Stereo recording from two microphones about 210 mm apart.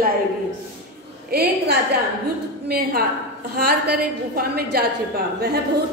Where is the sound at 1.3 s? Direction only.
50° right (ahead or behind).